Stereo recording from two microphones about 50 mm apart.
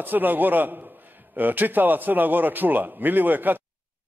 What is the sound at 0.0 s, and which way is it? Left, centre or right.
A man's voice, right.